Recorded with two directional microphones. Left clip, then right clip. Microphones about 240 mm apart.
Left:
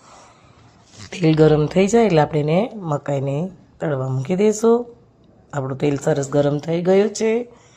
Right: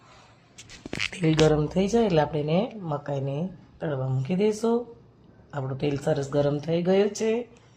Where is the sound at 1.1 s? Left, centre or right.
Left.